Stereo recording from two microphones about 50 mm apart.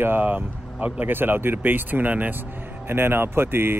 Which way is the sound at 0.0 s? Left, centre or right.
Right.